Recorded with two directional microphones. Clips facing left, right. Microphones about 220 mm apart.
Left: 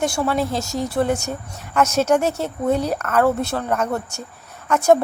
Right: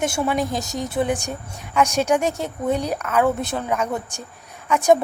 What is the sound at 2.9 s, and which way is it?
A woman's voice, 10° right (ahead or behind).